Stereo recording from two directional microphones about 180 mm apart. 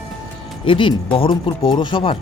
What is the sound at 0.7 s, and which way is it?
Speech, 30° left (ahead or behind).